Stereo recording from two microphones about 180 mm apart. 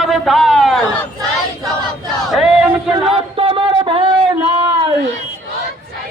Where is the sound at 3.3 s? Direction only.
30° right (ahead or behind).